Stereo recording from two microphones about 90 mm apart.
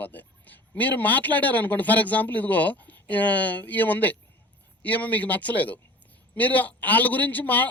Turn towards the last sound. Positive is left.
turn(degrees=20)  # may be behind; listen again after turning